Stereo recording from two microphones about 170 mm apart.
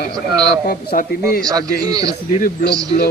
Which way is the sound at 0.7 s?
60° left (ahead or behind).